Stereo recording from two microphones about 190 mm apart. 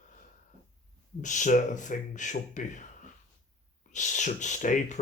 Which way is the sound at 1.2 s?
40° left (ahead or behind).